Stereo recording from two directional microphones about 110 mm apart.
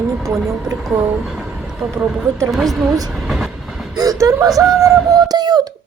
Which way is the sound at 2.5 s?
Centre (ahead or behind).